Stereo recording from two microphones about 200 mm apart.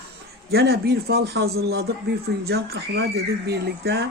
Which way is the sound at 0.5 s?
55° right (ahead or behind).